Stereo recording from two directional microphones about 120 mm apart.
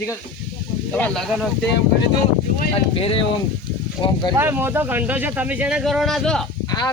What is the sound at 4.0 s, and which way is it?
Speech, 30° left (ahead or behind).